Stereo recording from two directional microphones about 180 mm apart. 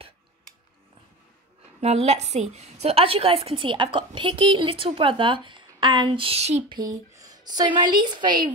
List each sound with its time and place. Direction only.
1.8 s a woman's voice: 35° right (ahead or behind)
6.8 s a woman's voice: 20° right (ahead or behind)